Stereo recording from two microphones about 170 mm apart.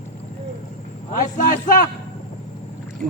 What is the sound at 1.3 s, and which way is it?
Speech, 50° left (ahead or behind).